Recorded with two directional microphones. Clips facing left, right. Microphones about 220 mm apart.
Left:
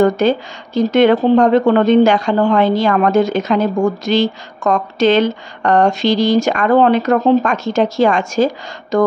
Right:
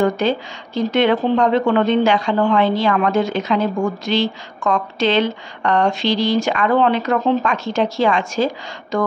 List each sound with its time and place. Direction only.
0.0 s speech: 45° left (ahead or behind)